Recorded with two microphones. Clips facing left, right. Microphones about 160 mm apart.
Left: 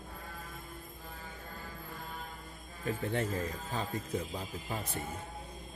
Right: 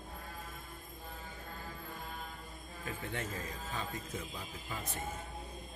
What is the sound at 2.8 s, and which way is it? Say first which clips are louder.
A man's voice: left 7 dB; 35° left (ahead or behind).